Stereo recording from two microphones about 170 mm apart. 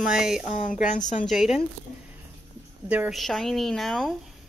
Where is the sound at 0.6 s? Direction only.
45° left (ahead or behind).